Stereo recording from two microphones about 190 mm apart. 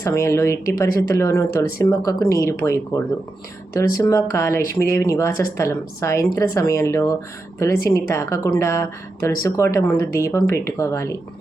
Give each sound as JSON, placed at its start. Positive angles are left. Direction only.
{"t": 0.0, "sound": "speech", "side_deg": 15}